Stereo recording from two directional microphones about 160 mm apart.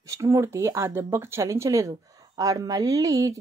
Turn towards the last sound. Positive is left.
turn(degrees=-20)  # may be behind; listen again after turning